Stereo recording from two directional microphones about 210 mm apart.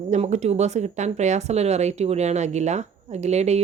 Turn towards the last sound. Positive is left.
turn(degrees=-30)  # may be behind; listen again after turning